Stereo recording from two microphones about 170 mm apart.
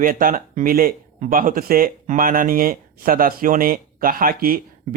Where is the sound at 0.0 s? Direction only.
55° right (ahead or behind).